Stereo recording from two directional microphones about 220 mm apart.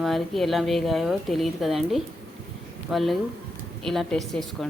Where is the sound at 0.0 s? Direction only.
Centre (ahead or behind).